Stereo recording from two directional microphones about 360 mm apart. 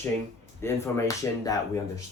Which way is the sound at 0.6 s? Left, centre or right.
Centre.